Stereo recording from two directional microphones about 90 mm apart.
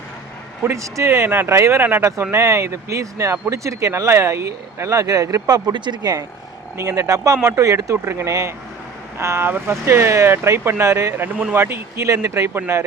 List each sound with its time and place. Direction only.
0.6 s speech: 35° right (ahead or behind)
5.7 s speech: 55° right (ahead or behind)
6.7 s speech: 35° right (ahead or behind)